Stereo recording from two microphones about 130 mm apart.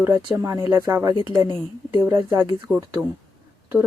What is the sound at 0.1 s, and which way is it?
Speech, 30° right (ahead or behind).